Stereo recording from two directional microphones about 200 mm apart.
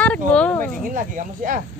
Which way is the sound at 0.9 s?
40° right (ahead or behind).